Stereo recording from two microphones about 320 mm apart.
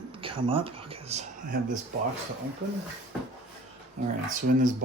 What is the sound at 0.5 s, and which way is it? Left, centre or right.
Speech, centre.